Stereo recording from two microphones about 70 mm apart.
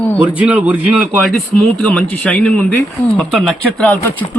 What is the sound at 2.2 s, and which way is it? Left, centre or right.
Speech, centre.